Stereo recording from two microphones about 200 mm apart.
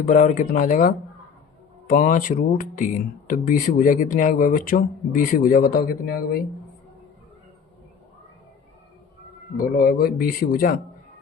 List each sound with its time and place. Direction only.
0.0 s speech: 40° left (ahead or behind)
9.6 s speech: 45° left (ahead or behind)